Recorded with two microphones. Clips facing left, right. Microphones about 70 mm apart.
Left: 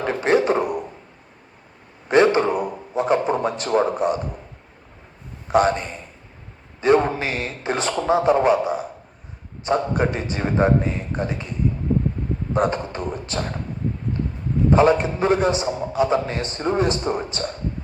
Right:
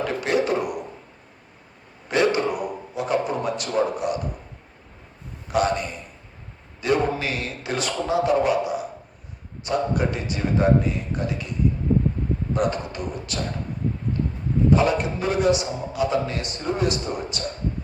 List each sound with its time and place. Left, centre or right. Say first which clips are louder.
0.0 s a man's voice: left 4 dB; left
2.0 s a sound: left 5 dB; left
5.5 s a man's voice: left 4 dB; left
6.8 s a man's voice: left 5 dB; left
12.5 s a man's voice: left 4 dB; left
14.7 s a man's voice: left 5 dB; left